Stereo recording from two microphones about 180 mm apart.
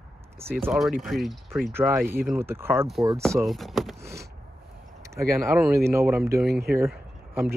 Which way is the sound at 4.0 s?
15° right (ahead or behind).